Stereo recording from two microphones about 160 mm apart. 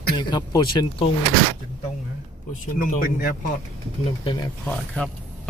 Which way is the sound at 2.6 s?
60° left (ahead or behind).